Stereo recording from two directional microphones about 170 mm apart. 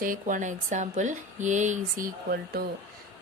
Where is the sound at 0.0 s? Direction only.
50° right (ahead or behind).